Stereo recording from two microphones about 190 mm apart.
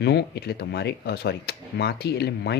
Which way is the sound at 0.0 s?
60° left (ahead or behind).